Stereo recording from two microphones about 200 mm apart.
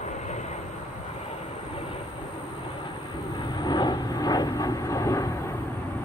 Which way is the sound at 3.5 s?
20° left (ahead or behind).